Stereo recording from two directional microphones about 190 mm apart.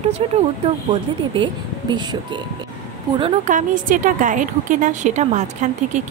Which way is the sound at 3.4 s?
45° right (ahead or behind).